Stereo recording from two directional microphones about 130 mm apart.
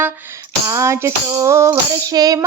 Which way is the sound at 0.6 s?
20° right (ahead or behind).